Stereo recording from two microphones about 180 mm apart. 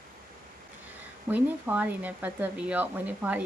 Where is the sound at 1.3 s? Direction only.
10° right (ahead or behind).